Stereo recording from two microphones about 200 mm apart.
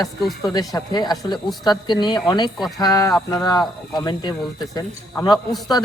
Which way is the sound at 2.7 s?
15° left (ahead or behind).